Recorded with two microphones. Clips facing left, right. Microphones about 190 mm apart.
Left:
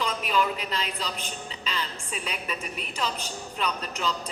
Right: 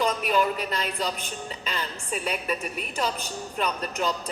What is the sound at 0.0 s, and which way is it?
Speech, 45° right (ahead or behind).